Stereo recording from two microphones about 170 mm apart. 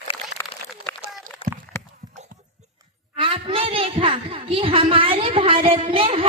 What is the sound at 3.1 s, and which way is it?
A woman's voice, 30° right (ahead or behind).